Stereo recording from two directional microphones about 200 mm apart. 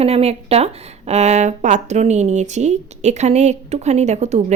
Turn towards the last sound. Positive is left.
turn(degrees=-35)  # may be behind; listen again after turning